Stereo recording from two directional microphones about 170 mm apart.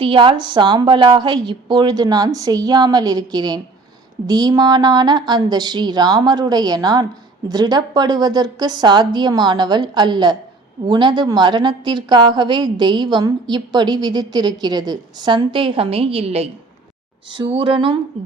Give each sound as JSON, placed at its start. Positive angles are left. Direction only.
{"t": 0.0, "sound": "a woman's voice", "side_deg": -30}